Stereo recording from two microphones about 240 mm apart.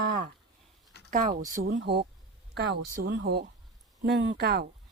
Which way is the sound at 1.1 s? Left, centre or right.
Right.